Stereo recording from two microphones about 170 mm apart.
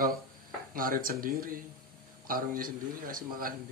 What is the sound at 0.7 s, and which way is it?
A man's voice, 55° right (ahead or behind).